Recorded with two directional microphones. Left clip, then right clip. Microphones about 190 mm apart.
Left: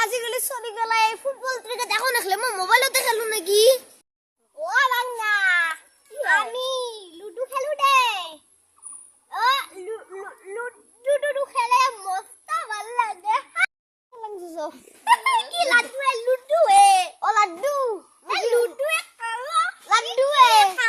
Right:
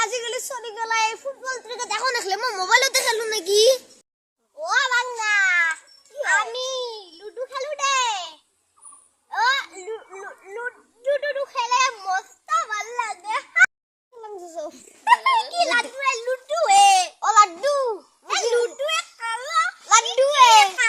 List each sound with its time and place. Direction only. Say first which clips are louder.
0.0 s a child's voice: left 1 dB; centre (ahead or behind)
4.6 s cat: even; 20° right (ahead or behind); by 6.2 s 5° right (ahead or behind)
6.3 s a sound: left 1 dB; 10° right (ahead or behind)
14.2 s a sound: left 2 dB; 25° left (ahead or behind)
14.8 s a child's voice: right 2 dB; 15° right (ahead or behind)
17.2 s a child's voice: right 4 dB; 10° left (ahead or behind)
18.3 s dog: even; 10° right (ahead or behind)
20.1 s a child's voice: right 1 dB; 10° left (ahead or behind)
20.8 s a child's voice: right 1 dB; 10° right (ahead or behind)